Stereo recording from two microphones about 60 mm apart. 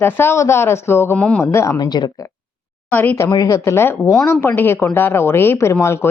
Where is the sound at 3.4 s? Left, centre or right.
Left.